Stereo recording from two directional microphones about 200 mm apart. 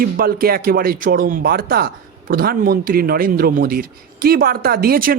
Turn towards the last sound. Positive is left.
turn(degrees=-45)  # may be behind; listen again after turning